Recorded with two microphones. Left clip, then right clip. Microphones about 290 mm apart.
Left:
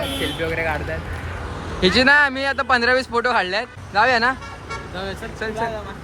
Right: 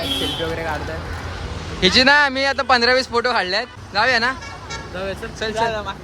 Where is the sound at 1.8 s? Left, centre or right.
Centre.